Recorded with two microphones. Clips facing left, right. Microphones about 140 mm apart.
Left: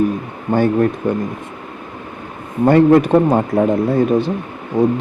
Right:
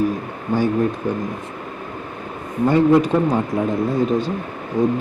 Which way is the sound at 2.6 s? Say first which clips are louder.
Left 4 dB; 60° left (ahead or behind).